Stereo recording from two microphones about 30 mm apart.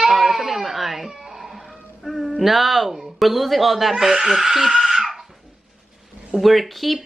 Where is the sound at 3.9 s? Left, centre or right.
Centre.